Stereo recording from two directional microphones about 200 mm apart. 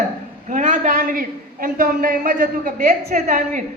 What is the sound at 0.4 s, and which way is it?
A man's voice, 40° right (ahead or behind).